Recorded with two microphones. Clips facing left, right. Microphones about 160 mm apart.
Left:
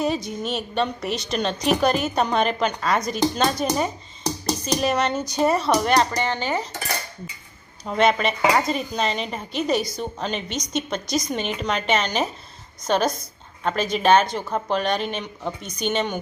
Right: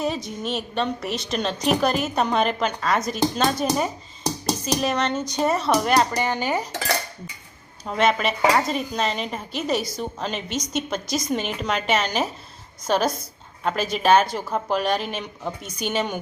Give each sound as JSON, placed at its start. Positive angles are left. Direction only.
{"t": 0.0, "sound": "a woman's voice", "side_deg": 0}
{"t": 7.9, "sound": "a woman's voice", "side_deg": 0}